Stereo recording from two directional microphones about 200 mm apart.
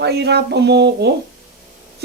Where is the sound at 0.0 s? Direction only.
55° right (ahead or behind).